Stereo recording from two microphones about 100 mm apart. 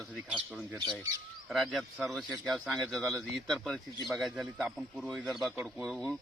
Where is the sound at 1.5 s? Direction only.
Centre (ahead or behind).